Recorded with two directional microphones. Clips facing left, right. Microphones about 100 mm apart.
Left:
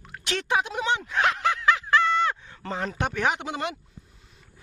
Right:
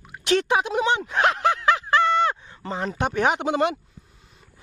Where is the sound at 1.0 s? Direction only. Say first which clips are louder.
Right 3 dB; 30° right (ahead or behind).